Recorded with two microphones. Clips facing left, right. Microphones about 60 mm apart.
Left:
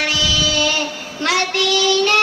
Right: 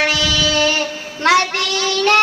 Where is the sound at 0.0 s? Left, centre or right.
Right.